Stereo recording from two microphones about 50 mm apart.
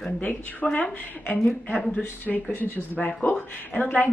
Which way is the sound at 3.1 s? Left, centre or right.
Left.